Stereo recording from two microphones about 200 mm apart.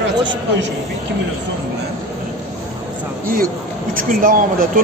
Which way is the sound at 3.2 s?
45° right (ahead or behind).